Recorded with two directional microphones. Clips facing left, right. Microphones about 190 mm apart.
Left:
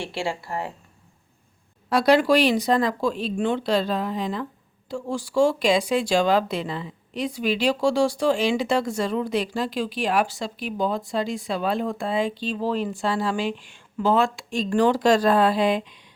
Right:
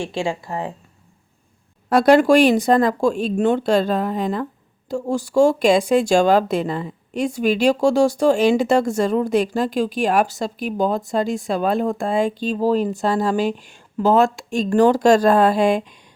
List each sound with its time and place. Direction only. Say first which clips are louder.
0.0 s a woman's voice: right 5 dB; 15° right (ahead or behind)
1.9 s speech: right 5 dB; 50° right (ahead or behind)